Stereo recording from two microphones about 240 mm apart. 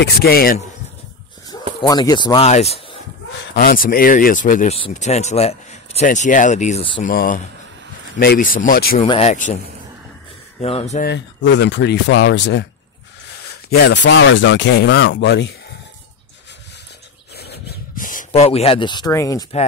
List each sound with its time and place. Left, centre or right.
0.0 s speech: left
1.8 s speech: centre
3.5 s speech: left
9.0 s speech: left
10.6 s speech: left
11.1 s speech: left
13.7 s speech: left
17.4 s a sound: left; by 19.4 s centre